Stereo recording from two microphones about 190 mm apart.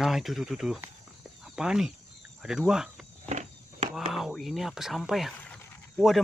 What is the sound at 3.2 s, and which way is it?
Walk, 35° right (ahead or behind).